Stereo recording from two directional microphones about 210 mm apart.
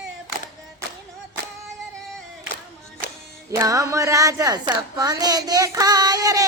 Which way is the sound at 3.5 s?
15° right (ahead or behind).